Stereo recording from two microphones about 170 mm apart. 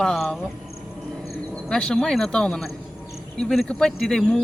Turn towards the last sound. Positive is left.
turn(degrees=5)  # may be behind; listen again after turning